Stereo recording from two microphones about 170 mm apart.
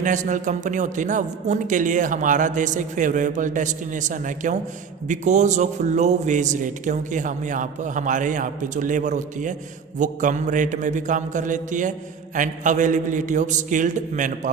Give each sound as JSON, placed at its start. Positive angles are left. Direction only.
{"t": 0.0, "sound": "speech", "side_deg": -45}